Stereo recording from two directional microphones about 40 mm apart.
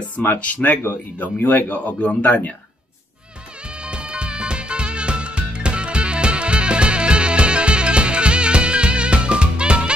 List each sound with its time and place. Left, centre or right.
0.2 s speech: left
3.8 s music: right